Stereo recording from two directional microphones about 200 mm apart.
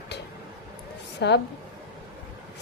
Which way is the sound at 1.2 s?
60° left (ahead or behind).